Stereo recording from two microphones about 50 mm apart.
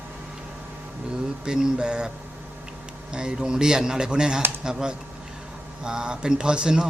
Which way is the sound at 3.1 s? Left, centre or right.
Centre.